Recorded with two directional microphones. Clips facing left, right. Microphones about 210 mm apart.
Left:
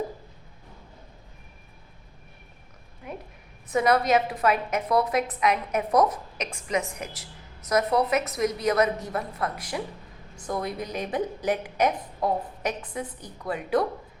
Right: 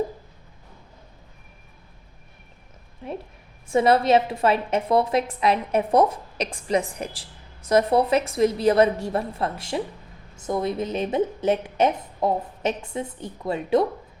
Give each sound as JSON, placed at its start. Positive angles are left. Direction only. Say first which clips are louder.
{"t": 3.0, "sound": "a woman's voice", "louder": "right 5 dB", "side_deg": -30}